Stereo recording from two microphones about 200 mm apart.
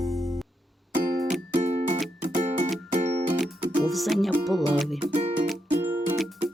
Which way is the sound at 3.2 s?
Centre (ahead or behind).